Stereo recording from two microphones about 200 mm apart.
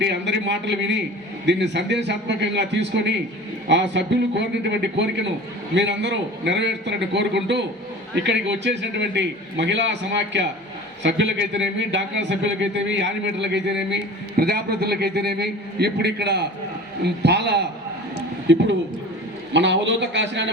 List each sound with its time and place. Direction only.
0.0 s speech: 60° right (ahead or behind)